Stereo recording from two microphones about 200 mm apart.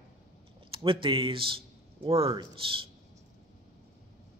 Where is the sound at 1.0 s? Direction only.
25° right (ahead or behind).